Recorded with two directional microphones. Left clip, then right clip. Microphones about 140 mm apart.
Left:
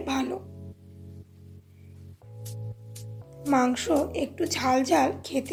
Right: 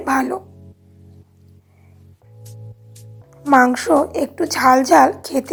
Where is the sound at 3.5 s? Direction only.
20° right (ahead or behind).